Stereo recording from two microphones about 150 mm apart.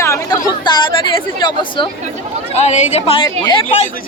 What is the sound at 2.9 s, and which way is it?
Speech, 40° left (ahead or behind).